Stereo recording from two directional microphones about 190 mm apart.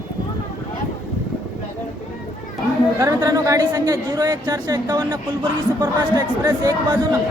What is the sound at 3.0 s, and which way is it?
A woman's voice, 15° right (ahead or behind).